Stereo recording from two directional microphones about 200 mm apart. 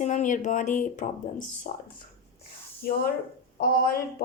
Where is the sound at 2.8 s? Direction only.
50° left (ahead or behind).